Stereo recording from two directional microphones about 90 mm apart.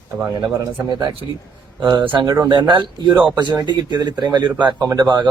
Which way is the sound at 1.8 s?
60° right (ahead or behind).